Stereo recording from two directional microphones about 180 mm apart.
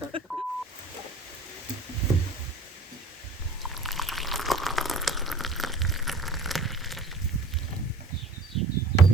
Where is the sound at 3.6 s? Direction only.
Centre (ahead or behind).